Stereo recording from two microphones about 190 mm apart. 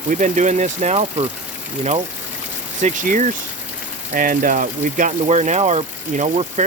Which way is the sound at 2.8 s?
40° right (ahead or behind).